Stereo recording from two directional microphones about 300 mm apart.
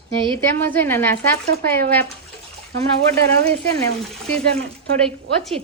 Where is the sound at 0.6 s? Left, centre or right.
Centre.